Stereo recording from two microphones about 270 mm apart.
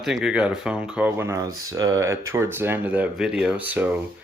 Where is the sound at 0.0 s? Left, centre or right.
Centre.